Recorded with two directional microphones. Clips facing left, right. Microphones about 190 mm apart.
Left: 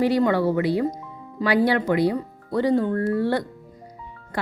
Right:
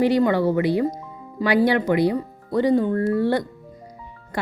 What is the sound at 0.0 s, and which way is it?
A woman's voice, 15° right (ahead or behind).